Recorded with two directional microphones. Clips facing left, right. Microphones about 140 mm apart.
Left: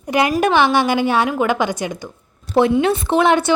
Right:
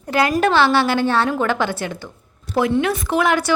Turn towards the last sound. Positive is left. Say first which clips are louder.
# left 3 dB
turn(degrees=25)  # may be behind; listen again after turning